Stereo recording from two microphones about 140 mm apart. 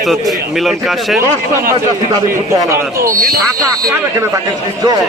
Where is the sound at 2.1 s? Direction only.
25° right (ahead or behind).